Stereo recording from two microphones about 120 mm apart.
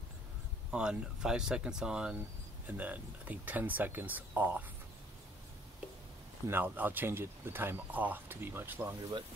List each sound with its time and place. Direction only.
0.7 s speech: 5° right (ahead or behind)
6.4 s speech: 15° right (ahead or behind)